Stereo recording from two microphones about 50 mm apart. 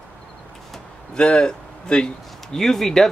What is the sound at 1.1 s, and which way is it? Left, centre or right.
Speech, centre.